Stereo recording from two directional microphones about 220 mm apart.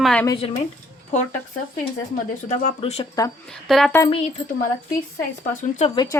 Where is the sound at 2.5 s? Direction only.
30° left (ahead or behind).